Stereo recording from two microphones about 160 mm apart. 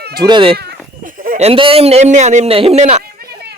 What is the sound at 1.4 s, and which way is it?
Speech, 35° right (ahead or behind).